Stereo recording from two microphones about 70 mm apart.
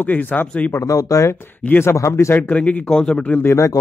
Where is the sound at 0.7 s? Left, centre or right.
Left.